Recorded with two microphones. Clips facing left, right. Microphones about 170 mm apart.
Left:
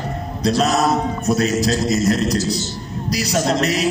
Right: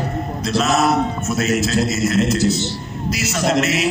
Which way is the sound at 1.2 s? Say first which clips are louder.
Left 2 dB; 35° left (ahead or behind).